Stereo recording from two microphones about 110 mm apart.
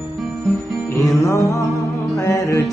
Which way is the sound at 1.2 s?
30° left (ahead or behind).